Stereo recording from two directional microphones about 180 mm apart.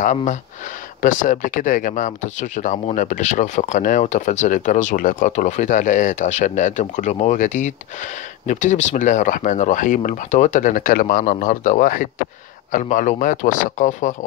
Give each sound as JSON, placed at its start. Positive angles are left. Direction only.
{"t": 0.0, "sound": "speech", "side_deg": 45}